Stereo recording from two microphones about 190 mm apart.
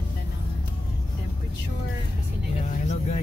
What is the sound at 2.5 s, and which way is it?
Vehicle, 35° left (ahead or behind).